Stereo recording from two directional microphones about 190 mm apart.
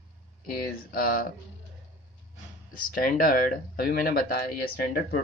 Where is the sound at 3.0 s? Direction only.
50° left (ahead or behind).